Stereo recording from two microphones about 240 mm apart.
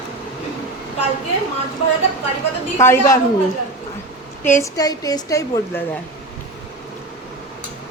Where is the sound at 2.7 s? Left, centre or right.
Centre.